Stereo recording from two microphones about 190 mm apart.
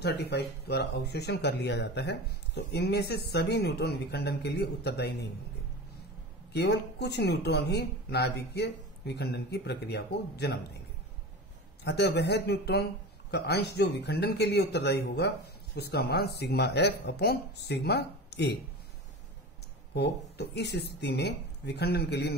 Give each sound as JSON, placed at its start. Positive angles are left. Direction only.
{"t": 0.0, "sound": "a man's voice", "side_deg": 60}
{"t": 6.5, "sound": "a man's voice", "side_deg": 60}
{"t": 11.8, "sound": "a man's voice", "side_deg": 60}
{"t": 19.9, "sound": "a man's voice", "side_deg": 60}